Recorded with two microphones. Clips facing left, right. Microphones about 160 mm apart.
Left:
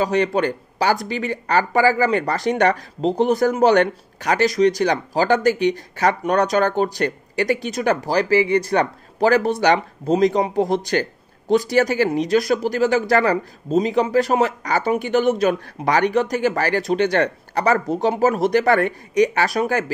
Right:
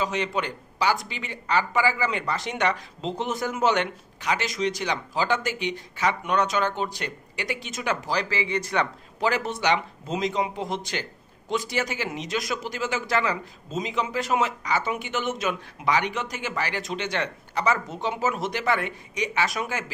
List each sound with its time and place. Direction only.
0.0 s speech: 40° left (ahead or behind)